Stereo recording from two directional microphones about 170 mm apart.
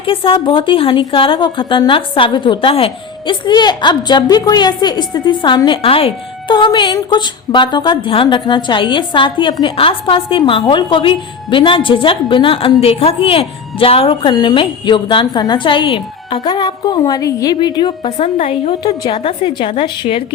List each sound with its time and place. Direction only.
0.0 s a woman's voice: 30° left (ahead or behind)
18.3 s a woman's voice: 35° left (ahead or behind)